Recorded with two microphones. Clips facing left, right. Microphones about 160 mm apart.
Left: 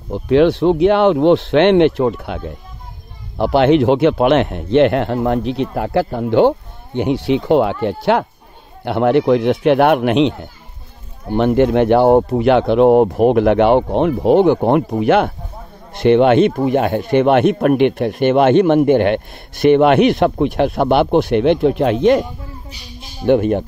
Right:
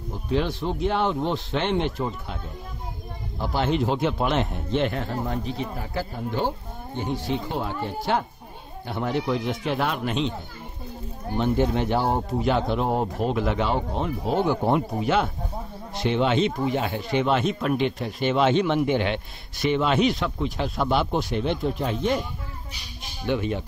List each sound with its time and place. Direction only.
0.1 s speech: 75° left (ahead or behind)
11.3 s speech: 70° left (ahead or behind)
23.2 s speech: 55° left (ahead or behind)